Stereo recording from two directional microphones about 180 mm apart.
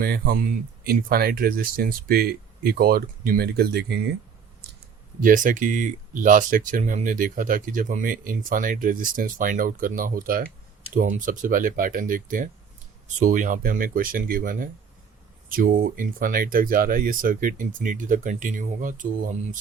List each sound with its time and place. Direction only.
0.0 s speech: 55° right (ahead or behind)
5.2 s speech: 50° right (ahead or behind)